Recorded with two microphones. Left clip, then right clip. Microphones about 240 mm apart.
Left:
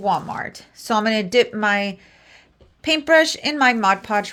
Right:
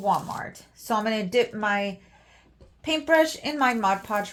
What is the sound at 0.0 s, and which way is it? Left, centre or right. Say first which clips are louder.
Speech: left 4 dB; left.